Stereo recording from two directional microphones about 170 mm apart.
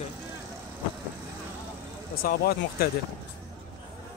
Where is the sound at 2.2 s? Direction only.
65° left (ahead or behind).